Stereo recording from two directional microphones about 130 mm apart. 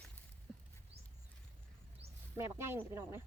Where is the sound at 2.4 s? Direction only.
20° right (ahead or behind).